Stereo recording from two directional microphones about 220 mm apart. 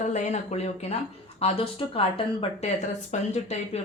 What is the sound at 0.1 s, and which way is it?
Speech, 30° left (ahead or behind).